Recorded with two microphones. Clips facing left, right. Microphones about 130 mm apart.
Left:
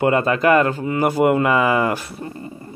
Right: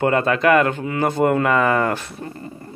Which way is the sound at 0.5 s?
35° left (ahead or behind).